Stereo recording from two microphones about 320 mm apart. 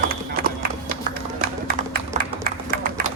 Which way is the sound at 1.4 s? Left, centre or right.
Right.